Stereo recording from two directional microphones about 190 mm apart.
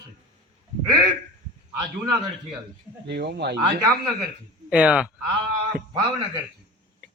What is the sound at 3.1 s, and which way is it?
Speech, 60° right (ahead or behind).